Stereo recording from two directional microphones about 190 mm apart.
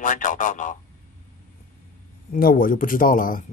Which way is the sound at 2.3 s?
50° left (ahead or behind).